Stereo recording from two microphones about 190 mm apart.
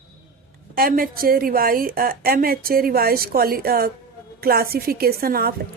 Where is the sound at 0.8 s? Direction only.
50° right (ahead or behind).